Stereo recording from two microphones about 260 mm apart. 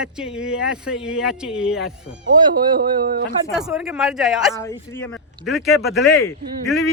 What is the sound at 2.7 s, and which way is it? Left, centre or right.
Speech, right.